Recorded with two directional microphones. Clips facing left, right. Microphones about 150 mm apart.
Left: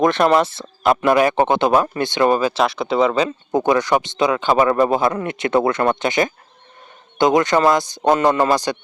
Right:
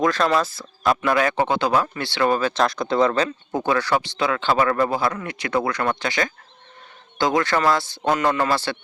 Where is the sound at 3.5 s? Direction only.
20° left (ahead or behind).